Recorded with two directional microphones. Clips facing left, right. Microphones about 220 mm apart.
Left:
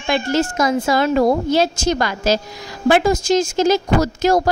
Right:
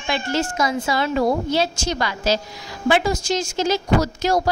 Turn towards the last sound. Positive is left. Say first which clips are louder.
# left 3 dB
turn(degrees=50)  # may be behind; listen again after turning